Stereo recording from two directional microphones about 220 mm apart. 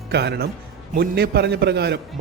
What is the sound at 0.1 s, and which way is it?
A man's voice, 50° right (ahead or behind).